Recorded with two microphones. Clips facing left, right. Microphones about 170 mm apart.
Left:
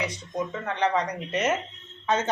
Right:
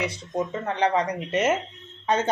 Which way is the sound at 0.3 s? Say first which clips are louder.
Right 3 dB; 30° right (ahead or behind).